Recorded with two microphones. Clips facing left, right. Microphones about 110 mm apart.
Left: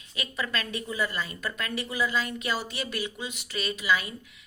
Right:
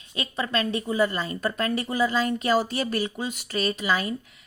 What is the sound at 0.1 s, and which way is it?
A woman's voice, 30° right (ahead or behind).